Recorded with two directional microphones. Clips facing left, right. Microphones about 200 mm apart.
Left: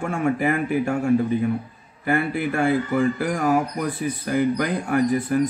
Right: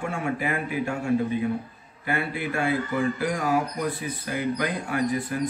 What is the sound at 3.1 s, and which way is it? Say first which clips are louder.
Speech: left 4 dB; 45° left (ahead or behind).